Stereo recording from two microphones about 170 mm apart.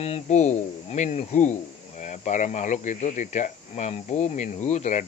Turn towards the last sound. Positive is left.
turn(degrees=45)  # may be behind; listen again after turning